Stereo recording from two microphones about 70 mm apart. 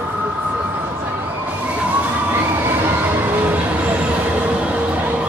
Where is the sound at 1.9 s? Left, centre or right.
Right.